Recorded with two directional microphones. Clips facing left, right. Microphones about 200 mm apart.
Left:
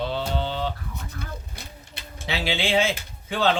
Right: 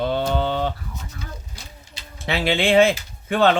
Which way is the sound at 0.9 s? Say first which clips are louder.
Even; 60° left (ahead or behind).